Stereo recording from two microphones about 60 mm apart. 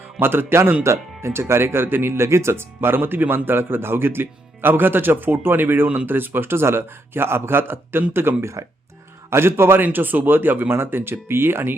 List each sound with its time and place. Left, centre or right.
0.2 s speech: right